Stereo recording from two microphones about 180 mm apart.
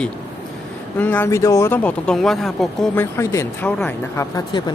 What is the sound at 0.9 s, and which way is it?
Speech, 10° left (ahead or behind).